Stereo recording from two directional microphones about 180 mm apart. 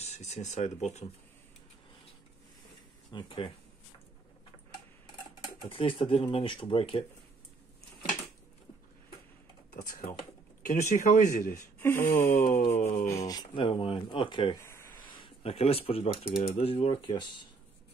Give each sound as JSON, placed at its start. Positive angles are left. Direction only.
{"t": 0.0, "sound": "speech", "side_deg": 40}
{"t": 3.1, "sound": "speech", "side_deg": 25}
{"t": 5.4, "sound": "speech", "side_deg": 30}
{"t": 9.8, "sound": "speech", "side_deg": 55}
{"t": 11.8, "sound": "speech", "side_deg": 15}
{"t": 14.6, "sound": "a sound", "side_deg": 15}
{"t": 15.0, "sound": "speech", "side_deg": 30}